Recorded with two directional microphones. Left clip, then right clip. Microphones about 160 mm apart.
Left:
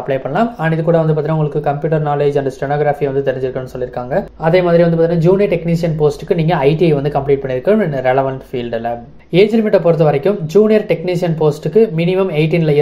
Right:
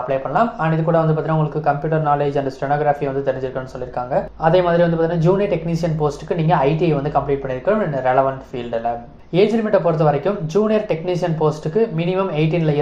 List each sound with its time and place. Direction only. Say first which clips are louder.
0.1 s speech: left 3 dB; 40° left (ahead or behind)
4.4 s speech: left 4 dB; 20° left (ahead or behind)
7.0 s speech: left 4 dB; 35° left (ahead or behind)
9.3 s speech: left 4 dB; 25° left (ahead or behind)